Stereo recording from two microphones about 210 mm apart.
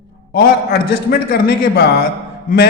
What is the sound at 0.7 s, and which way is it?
A man's voice, 45° left (ahead or behind).